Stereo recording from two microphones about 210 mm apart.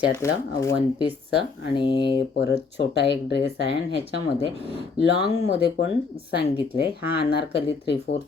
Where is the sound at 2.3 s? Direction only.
50° left (ahead or behind).